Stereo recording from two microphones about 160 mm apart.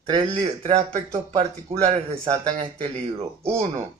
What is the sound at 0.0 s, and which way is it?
Speech, 35° right (ahead or behind).